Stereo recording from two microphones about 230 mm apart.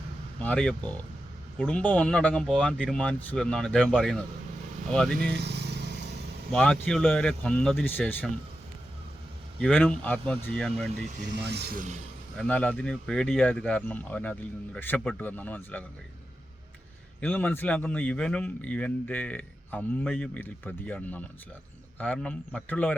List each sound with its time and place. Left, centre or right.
0.4 s speech: centre
5.2 s vehicle: right
6.5 s speech: centre
9.6 s speech: centre
10.9 s speech: right
11.3 s speech: right
12.4 s speech: centre
17.2 s speech: centre